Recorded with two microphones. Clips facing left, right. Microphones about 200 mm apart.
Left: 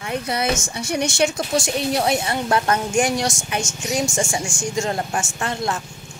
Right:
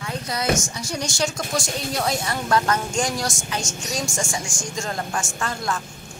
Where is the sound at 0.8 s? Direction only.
60° left (ahead or behind).